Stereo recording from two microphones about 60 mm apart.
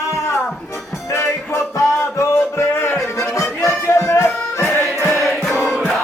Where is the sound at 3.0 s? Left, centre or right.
Left.